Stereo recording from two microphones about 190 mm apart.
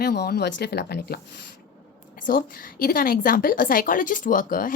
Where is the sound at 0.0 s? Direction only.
60° left (ahead or behind).